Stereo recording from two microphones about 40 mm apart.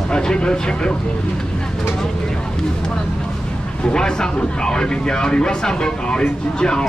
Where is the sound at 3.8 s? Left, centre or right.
Centre.